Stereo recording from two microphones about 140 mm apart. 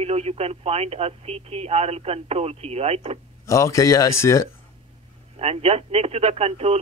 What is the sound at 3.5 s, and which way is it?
Speech, 20° left (ahead or behind).